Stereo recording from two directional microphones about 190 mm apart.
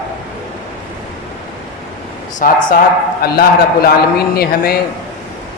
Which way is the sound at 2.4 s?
50° left (ahead or behind).